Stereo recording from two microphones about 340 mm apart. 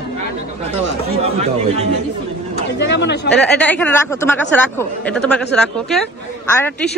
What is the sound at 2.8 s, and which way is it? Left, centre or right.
Speech, left.